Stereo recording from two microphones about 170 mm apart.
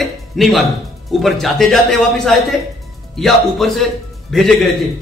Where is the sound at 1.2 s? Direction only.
Centre (ahead or behind).